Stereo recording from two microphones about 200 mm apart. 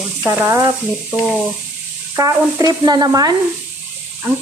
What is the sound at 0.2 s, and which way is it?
Speech, 10° right (ahead or behind).